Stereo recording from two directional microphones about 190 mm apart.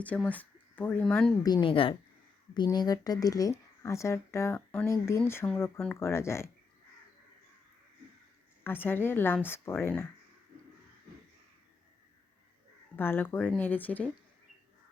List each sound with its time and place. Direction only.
0.0 s speech: 5° left (ahead or behind)
1.5 s a woman's voice: 25° left (ahead or behind)
8.6 s speech: 10° left (ahead or behind)
13.0 s speech: 10° left (ahead or behind)